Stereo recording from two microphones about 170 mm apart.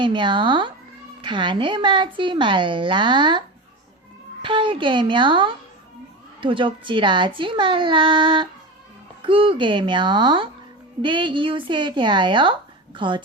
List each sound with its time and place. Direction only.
0.0 s speech: 30° right (ahead or behind)
4.4 s speech: 30° right (ahead or behind)